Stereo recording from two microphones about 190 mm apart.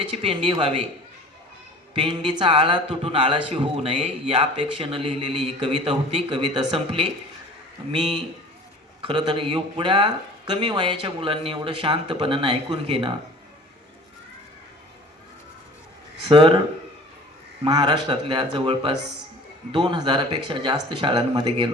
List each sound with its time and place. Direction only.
0.1 s a man's voice: 30° right (ahead or behind)
2.0 s a man's voice: 25° right (ahead or behind)
9.0 s a man's voice: 25° right (ahead or behind)
16.3 s a man's voice: 25° right (ahead or behind)
17.6 s a man's voice: 25° right (ahead or behind)